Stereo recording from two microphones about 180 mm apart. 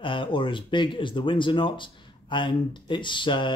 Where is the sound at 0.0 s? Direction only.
25° left (ahead or behind).